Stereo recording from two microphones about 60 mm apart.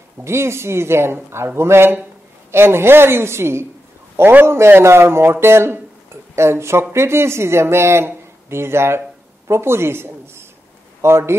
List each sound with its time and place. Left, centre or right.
0.2 s a man's voice: right